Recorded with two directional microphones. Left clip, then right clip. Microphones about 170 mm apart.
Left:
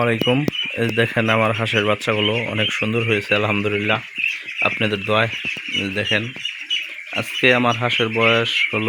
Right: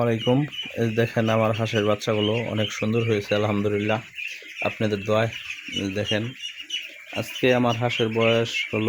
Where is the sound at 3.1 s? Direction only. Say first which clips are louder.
Left 5 dB; 25° left (ahead or behind).